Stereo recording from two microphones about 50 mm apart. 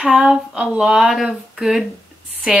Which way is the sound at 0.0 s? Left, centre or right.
Centre.